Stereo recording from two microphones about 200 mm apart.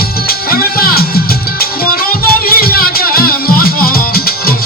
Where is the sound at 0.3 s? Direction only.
45° left (ahead or behind).